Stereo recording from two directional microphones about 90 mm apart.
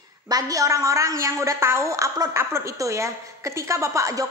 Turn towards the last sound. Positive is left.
turn(degrees=-35)  # may be behind; listen again after turning